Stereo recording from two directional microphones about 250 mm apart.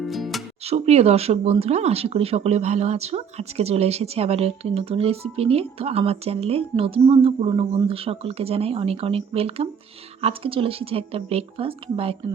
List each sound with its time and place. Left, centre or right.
0.0 s music: centre
0.6 s speech: right